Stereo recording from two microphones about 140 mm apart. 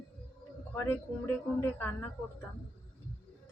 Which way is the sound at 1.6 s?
15° left (ahead or behind).